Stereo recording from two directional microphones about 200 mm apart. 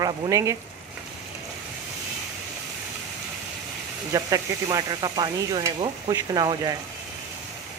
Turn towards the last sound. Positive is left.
turn(degrees=-20)  # may be behind; listen again after turning